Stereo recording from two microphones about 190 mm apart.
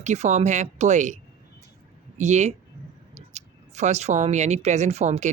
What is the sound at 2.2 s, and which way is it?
Speech, 35° right (ahead or behind).